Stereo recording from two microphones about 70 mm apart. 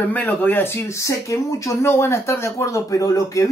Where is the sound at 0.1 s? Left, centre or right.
Left.